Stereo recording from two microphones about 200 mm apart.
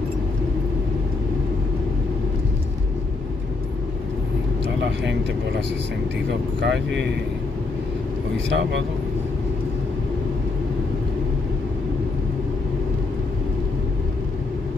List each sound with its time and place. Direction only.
6.6 s speech: 60° right (ahead or behind)
8.5 s speech: 65° right (ahead or behind)